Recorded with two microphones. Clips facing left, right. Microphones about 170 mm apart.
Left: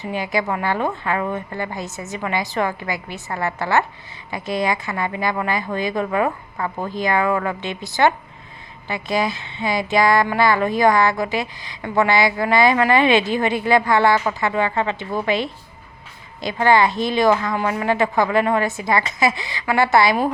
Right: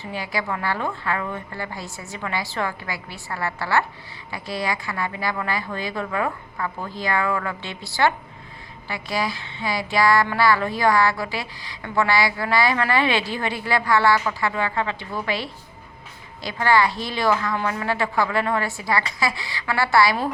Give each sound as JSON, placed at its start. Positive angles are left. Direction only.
{"t": 0.0, "sound": "speech", "side_deg": 20}